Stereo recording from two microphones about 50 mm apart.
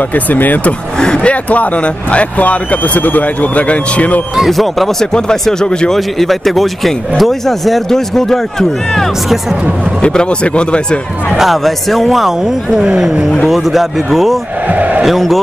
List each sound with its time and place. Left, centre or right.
0.1 s speech: left
0.9 s speech: centre
1.3 s speech: left
4.4 s speech: centre
5.9 s speech: centre
10.0 s speech: left
11.3 s speech: centre
13.5 s speech: centre
14.7 s a sound: right
15.0 s speech: centre